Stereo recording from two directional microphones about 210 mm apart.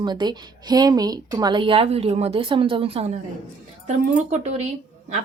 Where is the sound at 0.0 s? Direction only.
20° right (ahead or behind).